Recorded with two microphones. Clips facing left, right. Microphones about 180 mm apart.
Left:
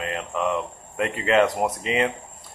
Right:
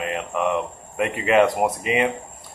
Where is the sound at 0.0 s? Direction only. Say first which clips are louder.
Right 2 dB; 10° right (ahead or behind).